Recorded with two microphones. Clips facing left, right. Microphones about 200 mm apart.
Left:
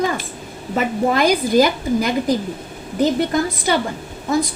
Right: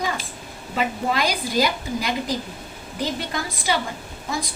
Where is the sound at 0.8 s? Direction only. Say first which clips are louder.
Left 6 dB; 50° left (ahead or behind).